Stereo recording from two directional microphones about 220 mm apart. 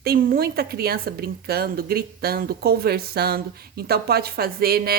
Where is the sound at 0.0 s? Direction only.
45° right (ahead or behind).